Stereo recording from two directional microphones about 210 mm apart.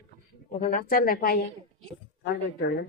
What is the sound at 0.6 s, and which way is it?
Speech, 40° left (ahead or behind).